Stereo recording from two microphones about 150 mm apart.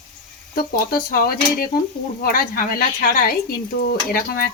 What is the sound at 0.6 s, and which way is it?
Speech, 85° left.